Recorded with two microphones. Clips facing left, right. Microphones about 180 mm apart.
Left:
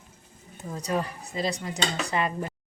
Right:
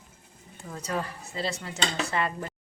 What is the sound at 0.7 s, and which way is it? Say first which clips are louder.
Speech: left 3 dB; 15° left (ahead or behind).